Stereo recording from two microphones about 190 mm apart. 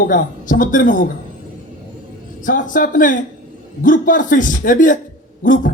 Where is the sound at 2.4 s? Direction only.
45° left (ahead or behind).